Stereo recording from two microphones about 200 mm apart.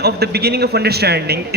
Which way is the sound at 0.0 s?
55° right (ahead or behind).